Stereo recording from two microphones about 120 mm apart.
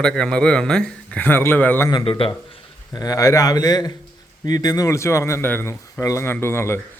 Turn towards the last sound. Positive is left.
turn(degrees=20)  # may be behind; listen again after turning